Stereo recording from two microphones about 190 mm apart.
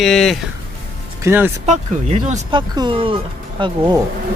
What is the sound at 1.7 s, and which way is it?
Speech, 35° right (ahead or behind).